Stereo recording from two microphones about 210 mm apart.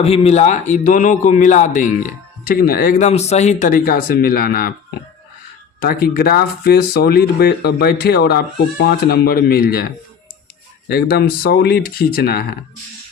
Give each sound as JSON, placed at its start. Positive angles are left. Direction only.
{"t": 0.0, "sound": "a man's voice", "side_deg": 30}
{"t": 3.1, "sound": "speech", "side_deg": 30}
{"t": 5.8, "sound": "speech", "side_deg": 45}